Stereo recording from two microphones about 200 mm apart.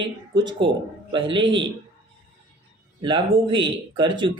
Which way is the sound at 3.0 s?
25° right (ahead or behind).